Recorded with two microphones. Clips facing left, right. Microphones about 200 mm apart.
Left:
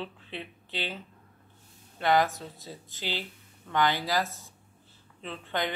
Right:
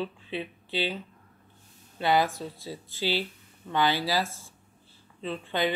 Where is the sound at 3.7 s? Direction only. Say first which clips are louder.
Right 1 dB; 10° right (ahead or behind).